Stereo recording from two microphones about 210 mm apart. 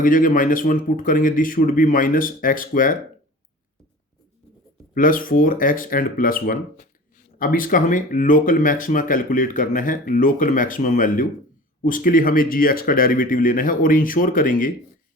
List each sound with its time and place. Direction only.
0.0 s speech: 40° left (ahead or behind)
4.9 s speech: 40° left (ahead or behind)